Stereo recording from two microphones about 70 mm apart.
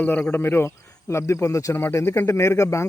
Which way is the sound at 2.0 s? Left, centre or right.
Left.